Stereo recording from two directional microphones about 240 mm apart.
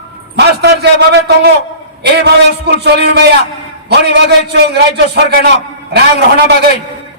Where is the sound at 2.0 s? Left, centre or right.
Right.